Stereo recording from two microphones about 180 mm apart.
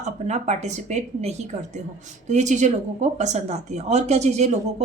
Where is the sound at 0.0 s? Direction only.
40° right (ahead or behind).